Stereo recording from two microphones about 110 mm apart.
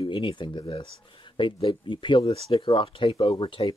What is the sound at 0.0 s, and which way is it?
Speech, 50° left (ahead or behind).